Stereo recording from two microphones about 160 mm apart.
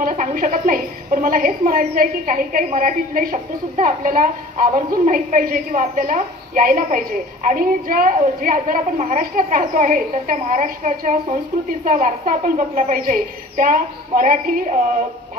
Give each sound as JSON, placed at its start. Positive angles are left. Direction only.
{"t": 0.0, "sound": "a woman's voice", "side_deg": -60}